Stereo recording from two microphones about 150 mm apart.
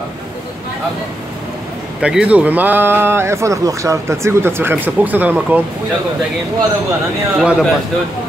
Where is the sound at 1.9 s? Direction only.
5° right (ahead or behind).